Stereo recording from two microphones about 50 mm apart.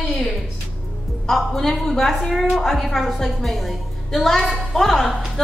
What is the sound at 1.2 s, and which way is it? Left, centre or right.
A woman's voice, centre.